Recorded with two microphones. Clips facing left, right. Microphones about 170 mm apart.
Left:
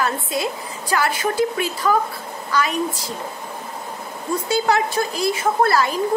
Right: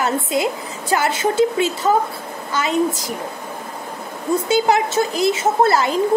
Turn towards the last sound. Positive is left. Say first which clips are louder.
# right 2 dB
turn(degrees=-25)  # may be behind; listen again after turning